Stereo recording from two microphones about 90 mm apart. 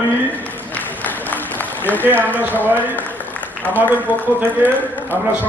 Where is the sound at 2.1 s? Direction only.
20° left (ahead or behind).